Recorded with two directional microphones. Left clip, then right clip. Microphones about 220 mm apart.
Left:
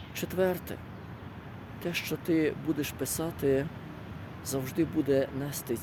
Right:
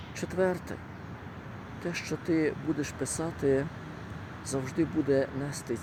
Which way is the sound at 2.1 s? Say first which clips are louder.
Even; 5° left (ahead or behind).